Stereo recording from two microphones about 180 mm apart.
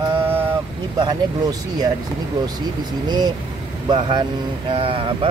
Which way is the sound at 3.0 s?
25° right (ahead or behind).